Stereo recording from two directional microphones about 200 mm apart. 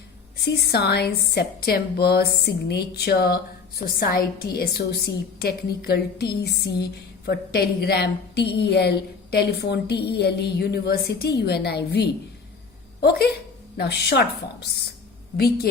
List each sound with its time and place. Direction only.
0.3 s a woman's voice: 50° left (ahead or behind)
15.7 s a woman's voice: 50° left (ahead or behind)